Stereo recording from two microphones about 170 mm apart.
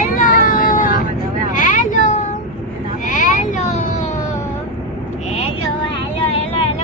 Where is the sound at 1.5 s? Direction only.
50° left (ahead or behind).